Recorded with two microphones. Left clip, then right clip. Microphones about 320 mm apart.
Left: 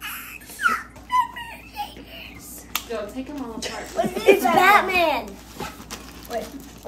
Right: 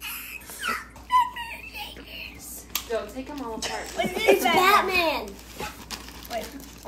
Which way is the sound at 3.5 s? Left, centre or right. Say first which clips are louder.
Right 1 dB; centre.